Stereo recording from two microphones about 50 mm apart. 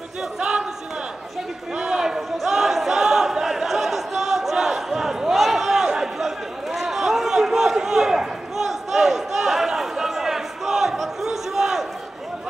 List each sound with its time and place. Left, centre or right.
0.4 s crowd: centre
1.8 s a sound: centre
2.4 s crowd: centre